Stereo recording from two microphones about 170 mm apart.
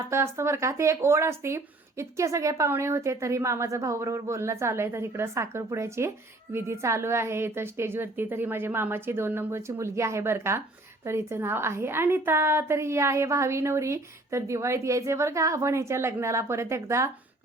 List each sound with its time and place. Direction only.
0.0 s a woman's voice: 15° right (ahead or behind)